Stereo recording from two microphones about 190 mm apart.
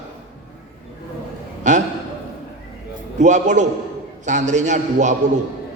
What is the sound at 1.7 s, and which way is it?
Speech, 40° right (ahead or behind).